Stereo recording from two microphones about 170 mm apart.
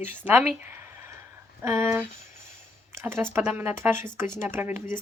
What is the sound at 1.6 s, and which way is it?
Speech, 15° right (ahead or behind).